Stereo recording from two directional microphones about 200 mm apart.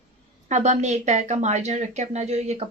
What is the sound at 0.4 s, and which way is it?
Speech, 35° right (ahead or behind).